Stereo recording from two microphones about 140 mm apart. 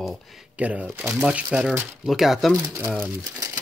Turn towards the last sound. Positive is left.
turn(degrees=-25)  # may be behind; listen again after turning